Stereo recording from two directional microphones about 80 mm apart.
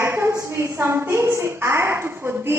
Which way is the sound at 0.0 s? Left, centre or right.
Right.